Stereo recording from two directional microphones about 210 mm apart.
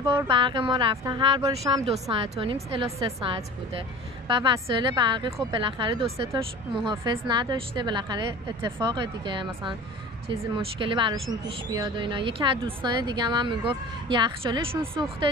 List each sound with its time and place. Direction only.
0.3 s a woman's voice: 20° right (ahead or behind)
4.3 s a woman's voice: 20° right (ahead or behind)